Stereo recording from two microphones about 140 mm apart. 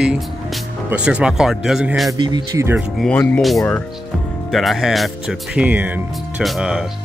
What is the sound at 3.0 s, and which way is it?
Speech, 10° left (ahead or behind).